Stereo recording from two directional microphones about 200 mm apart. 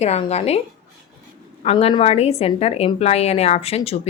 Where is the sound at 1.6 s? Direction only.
30° left (ahead or behind).